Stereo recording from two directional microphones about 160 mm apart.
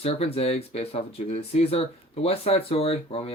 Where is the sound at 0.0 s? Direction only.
40° left (ahead or behind).